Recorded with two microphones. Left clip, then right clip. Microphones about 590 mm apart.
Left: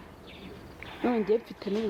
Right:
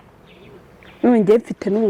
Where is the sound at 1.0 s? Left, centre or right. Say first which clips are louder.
Right 12 dB; right.